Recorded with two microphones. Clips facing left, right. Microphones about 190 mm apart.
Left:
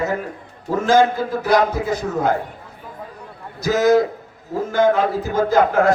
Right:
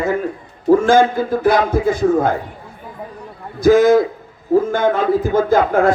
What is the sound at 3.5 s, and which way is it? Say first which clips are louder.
A man's voice: right 5 dB; 50° right (ahead or behind).